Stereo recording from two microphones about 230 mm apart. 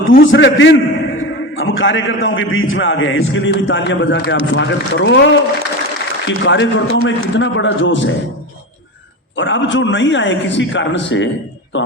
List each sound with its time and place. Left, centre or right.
0.2 s a man's voice: left
9.3 s a man's voice: left